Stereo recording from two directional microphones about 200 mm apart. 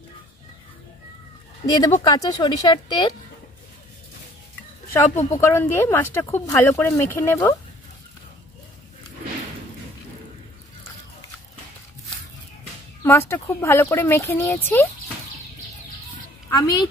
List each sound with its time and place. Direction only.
1.7 s speech: 15° left (ahead or behind)
4.9 s a woman's voice: 10° left (ahead or behind)
13.0 s a woman's voice: 10° left (ahead or behind)
16.4 s a woman's voice: 20° left (ahead or behind)